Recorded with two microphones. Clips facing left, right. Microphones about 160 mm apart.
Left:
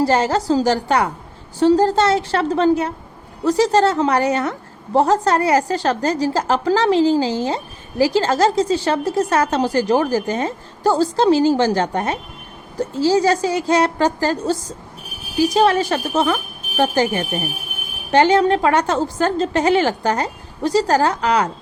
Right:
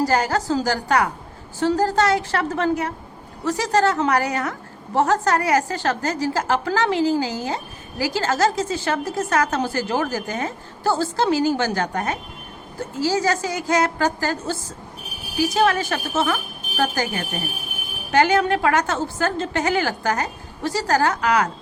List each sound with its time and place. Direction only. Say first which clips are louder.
0.0 s a woman's voice: left 3 dB; 30° left (ahead or behind)